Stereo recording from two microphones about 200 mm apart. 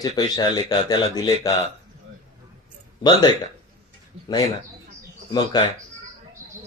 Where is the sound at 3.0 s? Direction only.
20° left (ahead or behind).